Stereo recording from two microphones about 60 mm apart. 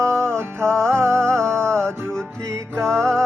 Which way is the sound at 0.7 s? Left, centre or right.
Centre.